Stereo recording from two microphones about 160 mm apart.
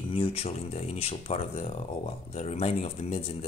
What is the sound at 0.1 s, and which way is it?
Speech, 35° left (ahead or behind).